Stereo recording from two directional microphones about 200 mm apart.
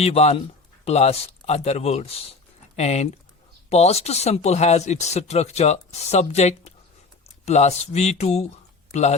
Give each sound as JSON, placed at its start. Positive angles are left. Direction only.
{"t": 0.0, "sound": "speech", "side_deg": 30}